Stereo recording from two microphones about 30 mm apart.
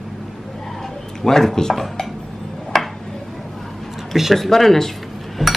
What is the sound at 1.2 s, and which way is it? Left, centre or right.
Speech, centre.